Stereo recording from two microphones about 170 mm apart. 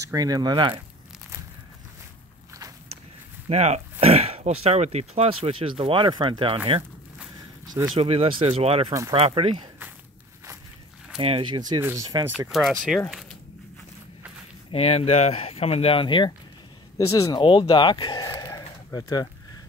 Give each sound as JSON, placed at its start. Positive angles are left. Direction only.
{"t": 0.1, "sound": "speech", "side_deg": -20}
{"t": 3.4, "sound": "speech", "side_deg": -40}
{"t": 7.9, "sound": "speech", "side_deg": -35}
{"t": 11.1, "sound": "speech", "side_deg": -30}
{"t": 12.4, "sound": "speech", "side_deg": 0}
{"t": 14.7, "sound": "speech", "side_deg": 35}